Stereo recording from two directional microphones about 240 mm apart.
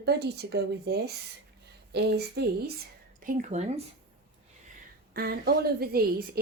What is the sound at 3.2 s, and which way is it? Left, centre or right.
Speech, right.